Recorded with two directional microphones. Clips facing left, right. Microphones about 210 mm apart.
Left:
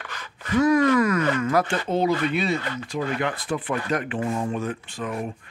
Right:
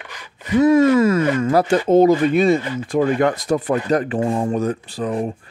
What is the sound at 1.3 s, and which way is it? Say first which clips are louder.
Speech: right 5 dB; 30° right (ahead or behind).